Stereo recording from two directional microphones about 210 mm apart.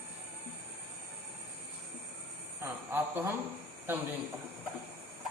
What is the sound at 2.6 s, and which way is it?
Speech, 10° right (ahead or behind).